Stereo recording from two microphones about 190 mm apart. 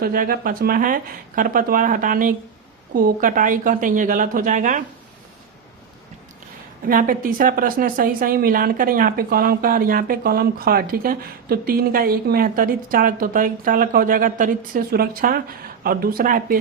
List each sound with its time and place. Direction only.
0.0 s a woman's voice: 50° right (ahead or behind)
6.8 s a woman's voice: 50° right (ahead or behind)